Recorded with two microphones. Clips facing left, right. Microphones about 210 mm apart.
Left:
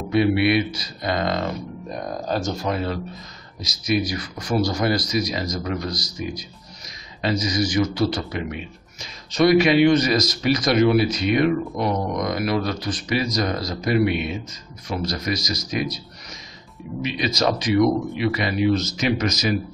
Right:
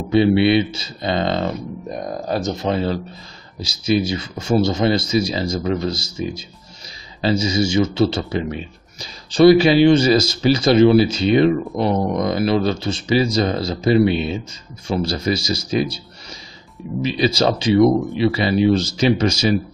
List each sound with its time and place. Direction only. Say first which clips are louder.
0.1 s a man's voice: right 4 dB; 25° right (ahead or behind)